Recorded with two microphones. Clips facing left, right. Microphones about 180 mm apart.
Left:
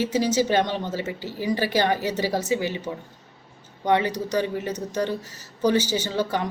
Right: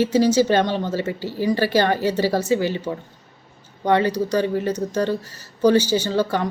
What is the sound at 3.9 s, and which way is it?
Speech, 15° left (ahead or behind).